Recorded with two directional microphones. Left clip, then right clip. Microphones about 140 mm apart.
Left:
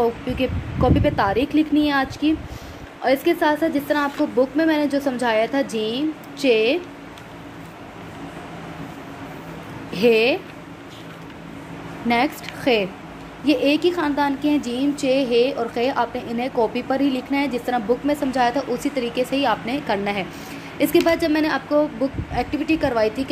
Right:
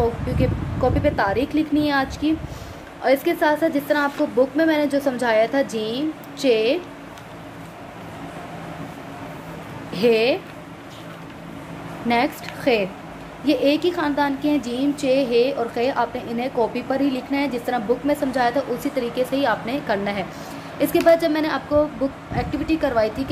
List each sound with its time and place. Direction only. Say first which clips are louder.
0.4 s a woman's voice: even; 15° left (ahead or behind)
9.9 s a woman's voice: left 1 dB; 15° left (ahead or behind)
12.1 s a woman's voice: even; 15° left (ahead or behind)